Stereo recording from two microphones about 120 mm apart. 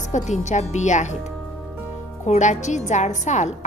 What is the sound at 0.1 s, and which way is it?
A woman's voice, 75° left (ahead or behind).